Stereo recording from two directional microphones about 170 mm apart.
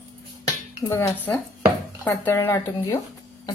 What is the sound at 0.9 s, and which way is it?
A woman's voice, 10° left (ahead or behind).